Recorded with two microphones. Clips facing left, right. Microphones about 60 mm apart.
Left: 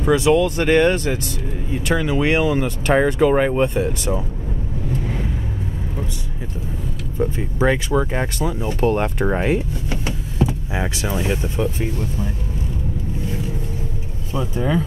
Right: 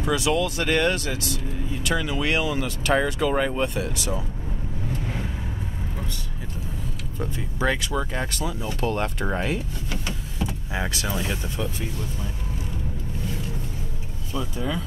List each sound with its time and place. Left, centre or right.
0.0 s speech: left
7.2 s speech: left
14.3 s speech: left